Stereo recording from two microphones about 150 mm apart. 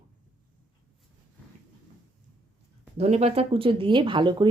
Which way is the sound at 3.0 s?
45° right (ahead or behind).